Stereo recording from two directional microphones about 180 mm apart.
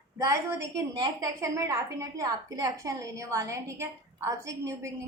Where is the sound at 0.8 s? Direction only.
20° right (ahead or behind).